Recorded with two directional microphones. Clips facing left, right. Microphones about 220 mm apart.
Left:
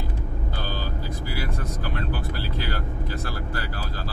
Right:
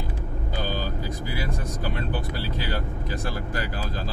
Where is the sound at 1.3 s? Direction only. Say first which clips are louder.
Even; 20° right (ahead or behind).